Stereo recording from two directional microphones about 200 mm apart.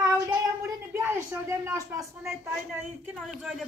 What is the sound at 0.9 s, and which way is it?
A woman's voice, 10° right (ahead or behind).